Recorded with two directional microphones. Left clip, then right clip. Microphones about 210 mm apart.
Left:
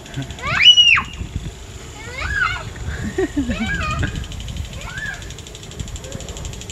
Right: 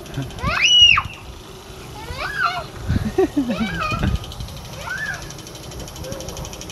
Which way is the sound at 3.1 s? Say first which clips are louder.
Right 2 dB; 15° right (ahead or behind).